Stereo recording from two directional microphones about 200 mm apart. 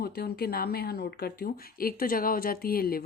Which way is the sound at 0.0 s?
50° left (ahead or behind).